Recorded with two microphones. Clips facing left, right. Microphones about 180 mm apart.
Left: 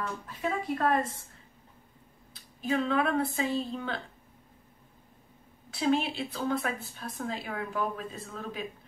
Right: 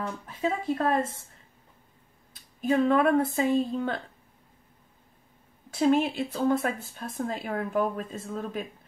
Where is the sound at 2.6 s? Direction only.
45° right (ahead or behind).